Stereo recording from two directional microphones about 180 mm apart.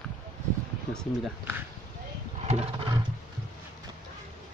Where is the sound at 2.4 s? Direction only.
35° right (ahead or behind).